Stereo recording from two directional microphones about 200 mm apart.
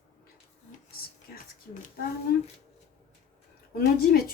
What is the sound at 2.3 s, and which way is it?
Speech, 50° left (ahead or behind).